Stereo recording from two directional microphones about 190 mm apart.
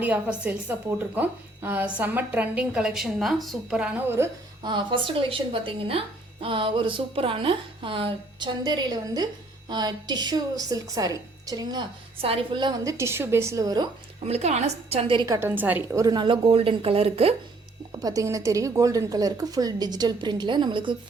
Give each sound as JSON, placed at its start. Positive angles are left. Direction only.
{"t": 0.0, "sound": "a woman's voice", "side_deg": -5}
{"t": 4.7, "sound": "a woman's voice", "side_deg": -25}
{"t": 14.3, "sound": "a woman's voice", "side_deg": -35}
{"t": 15.4, "sound": "a woman's voice", "side_deg": -10}
{"t": 16.0, "sound": "a woman's voice", "side_deg": -25}
{"t": 18.0, "sound": "a woman's voice", "side_deg": -20}